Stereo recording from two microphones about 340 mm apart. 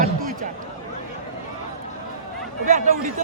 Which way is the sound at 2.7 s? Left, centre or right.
Right.